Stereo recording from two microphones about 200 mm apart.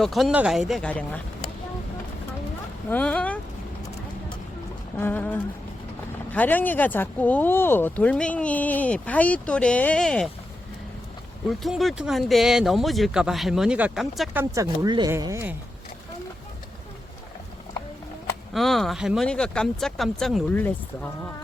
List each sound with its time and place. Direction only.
0.0 s speech: centre (ahead or behind)
2.9 s speech: 5° left (ahead or behind)
4.9 s speech: 10° left (ahead or behind)
11.4 s speech: centre (ahead or behind)
14.5 s speech: 15° right (ahead or behind)
18.5 s speech: centre (ahead or behind)